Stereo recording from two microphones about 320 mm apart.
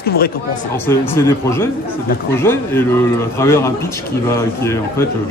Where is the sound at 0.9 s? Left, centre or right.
Centre.